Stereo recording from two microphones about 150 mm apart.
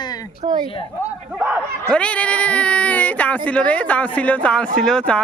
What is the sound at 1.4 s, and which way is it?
Speech, 15° right (ahead or behind).